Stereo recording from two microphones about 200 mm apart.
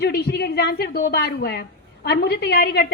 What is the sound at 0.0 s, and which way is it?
A woman's voice, 55° left (ahead or behind).